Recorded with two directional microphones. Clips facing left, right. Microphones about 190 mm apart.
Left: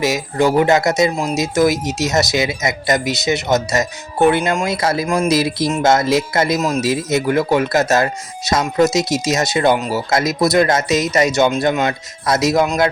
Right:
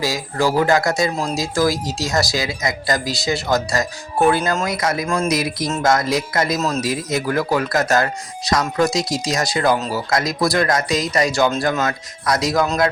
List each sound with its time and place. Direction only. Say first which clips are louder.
0.0 s speech: left 4 dB; 20° left (ahead or behind)
5.0 s speech: left 3 dB; 15° left (ahead or behind)
5.3 s speech: left 4 dB; 30° left (ahead or behind)
6.6 s speech: left 3 dB; 10° left (ahead or behind)
6.8 s speech: left 4 dB; 25° left (ahead or behind)